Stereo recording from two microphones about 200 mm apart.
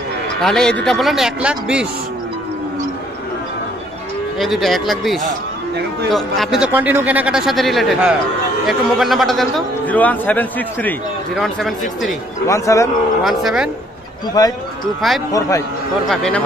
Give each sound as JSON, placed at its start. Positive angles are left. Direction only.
{"t": 0.4, "sound": "a man's voice", "side_deg": 5}
{"t": 4.4, "sound": "a man's voice", "side_deg": 0}
{"t": 12.4, "sound": "a man's voice", "side_deg": 15}
{"t": 13.2, "sound": "a man's voice", "side_deg": 0}
{"t": 14.4, "sound": "a man's voice", "side_deg": 20}
{"t": 15.0, "sound": "a man's voice", "side_deg": 0}